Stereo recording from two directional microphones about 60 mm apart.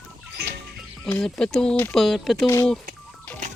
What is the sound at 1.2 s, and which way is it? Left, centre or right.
Speech, centre.